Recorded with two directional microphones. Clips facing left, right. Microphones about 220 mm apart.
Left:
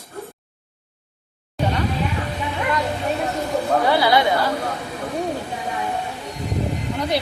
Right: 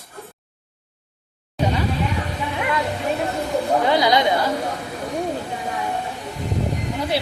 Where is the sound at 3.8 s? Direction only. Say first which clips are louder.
Left 1 dB; 15° right (ahead or behind).